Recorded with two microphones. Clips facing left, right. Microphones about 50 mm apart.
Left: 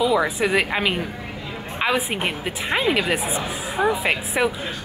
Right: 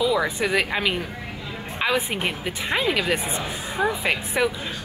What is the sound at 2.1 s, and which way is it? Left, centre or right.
Speech, centre.